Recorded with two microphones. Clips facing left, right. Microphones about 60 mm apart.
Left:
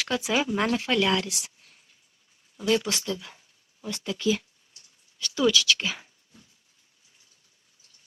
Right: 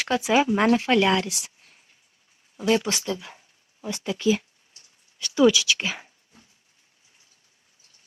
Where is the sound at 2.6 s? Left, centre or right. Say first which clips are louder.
Right 2 dB; centre.